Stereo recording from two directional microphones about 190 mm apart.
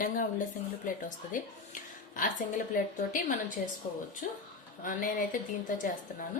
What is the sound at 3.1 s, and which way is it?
A woman's voice, 45° left (ahead or behind).